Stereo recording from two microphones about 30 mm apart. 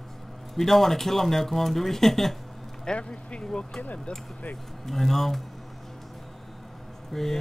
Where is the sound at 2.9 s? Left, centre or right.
Left.